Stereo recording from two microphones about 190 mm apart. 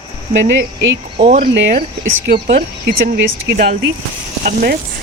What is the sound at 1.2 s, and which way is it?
Speech, 30° right (ahead or behind).